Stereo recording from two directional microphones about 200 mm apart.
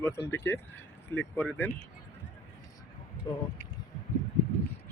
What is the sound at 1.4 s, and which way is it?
Speech, 10° left (ahead or behind).